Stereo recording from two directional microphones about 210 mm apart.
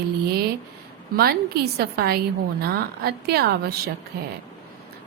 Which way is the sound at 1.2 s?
50° right (ahead or behind).